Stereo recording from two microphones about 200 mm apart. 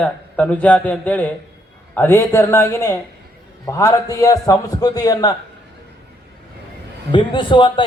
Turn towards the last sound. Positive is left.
turn(degrees=25)  # may be behind; listen again after turning